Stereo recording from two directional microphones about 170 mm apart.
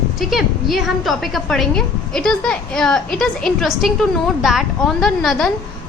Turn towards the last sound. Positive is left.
turn(degrees=0)  # may be behind; listen again after turning